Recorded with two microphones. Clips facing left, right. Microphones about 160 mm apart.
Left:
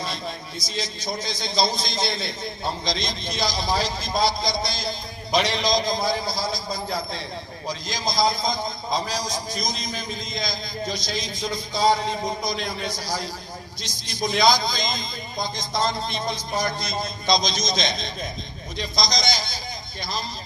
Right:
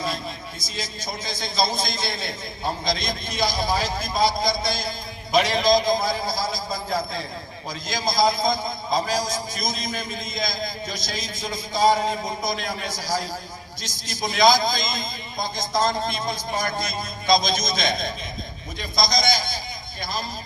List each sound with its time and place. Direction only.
0.8 s a man's voice: 50° right (ahead or behind)